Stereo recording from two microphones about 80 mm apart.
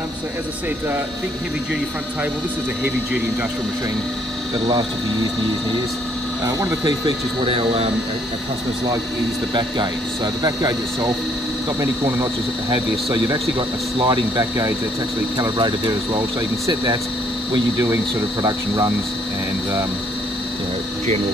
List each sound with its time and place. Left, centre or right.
4.6 s speech: right
6.4 s speech: right
7.1 s speech: right
9.5 s speech: right
12.6 s speech: right
15.5 s speech: right